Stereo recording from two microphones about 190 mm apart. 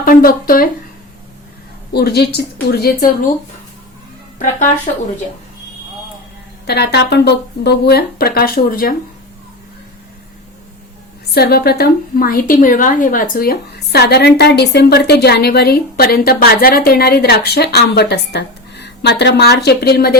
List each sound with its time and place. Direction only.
0.0 s speech: 50° left (ahead or behind)
1.9 s a woman's voice: 60° left (ahead or behind)
6.7 s a woman's voice: 60° left (ahead or behind)
11.3 s a woman's voice: 55° left (ahead or behind)